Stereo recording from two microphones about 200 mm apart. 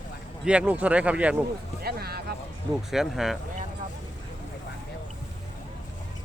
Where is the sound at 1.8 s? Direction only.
50° right (ahead or behind).